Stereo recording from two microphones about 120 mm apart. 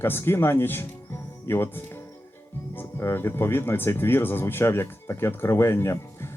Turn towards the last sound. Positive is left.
turn(degrees=20)  # may be behind; listen again after turning